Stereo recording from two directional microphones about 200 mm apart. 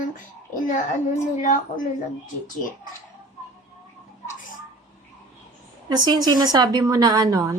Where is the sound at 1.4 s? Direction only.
40° left (ahead or behind).